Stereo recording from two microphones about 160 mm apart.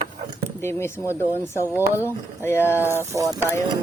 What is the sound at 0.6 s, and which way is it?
Speech, 15° left (ahead or behind).